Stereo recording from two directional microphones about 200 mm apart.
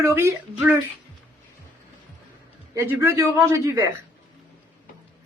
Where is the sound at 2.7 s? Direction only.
10° right (ahead or behind).